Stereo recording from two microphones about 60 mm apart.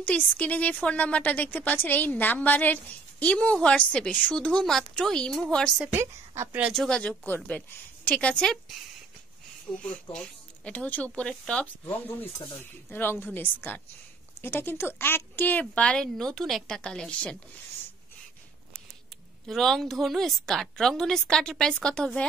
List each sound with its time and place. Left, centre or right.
0.0 s a woman's voice: left
4.6 s a woman's voice: centre
5.9 s a woman's voice: right
6.7 s a woman's voice: centre
7.2 s a woman's voice: left
9.8 s a woman's voice: centre
12.5 s a woman's voice: left
15.7 s a woman's voice: centre
16.0 s a woman's voice: centre
19.4 s a woman's voice: centre